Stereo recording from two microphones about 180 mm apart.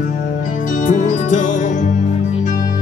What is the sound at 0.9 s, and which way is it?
Music, 45° left (ahead or behind).